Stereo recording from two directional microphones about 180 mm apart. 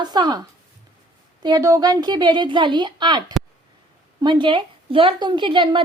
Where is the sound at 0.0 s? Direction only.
25° right (ahead or behind).